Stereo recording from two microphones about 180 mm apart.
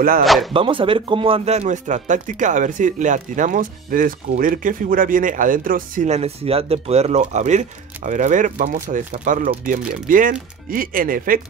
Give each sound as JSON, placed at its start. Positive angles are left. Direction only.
{"t": 0.2, "sound": "speech", "side_deg": 0}
{"t": 0.5, "sound": "speech", "side_deg": -30}
{"t": 6.0, "sound": "speech", "side_deg": -35}